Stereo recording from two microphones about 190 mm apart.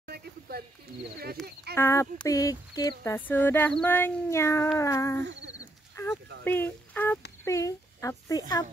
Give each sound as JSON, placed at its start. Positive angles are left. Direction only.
{"t": 0.0, "sound": "a sound", "side_deg": -55}
{"t": 1.2, "sound": "wild animals", "side_deg": -55}
{"t": 1.8, "sound": "speech", "side_deg": 15}
{"t": 3.0, "sound": "speech", "side_deg": 10}
{"t": 5.6, "sound": "a sound", "side_deg": 15}
{"t": 7.4, "sound": "a child's voice", "side_deg": 15}